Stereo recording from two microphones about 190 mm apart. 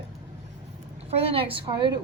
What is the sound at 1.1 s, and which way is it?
Speech, 30° right (ahead or behind).